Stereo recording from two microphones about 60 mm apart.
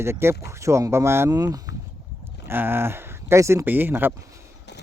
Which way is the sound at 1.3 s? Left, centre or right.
Right.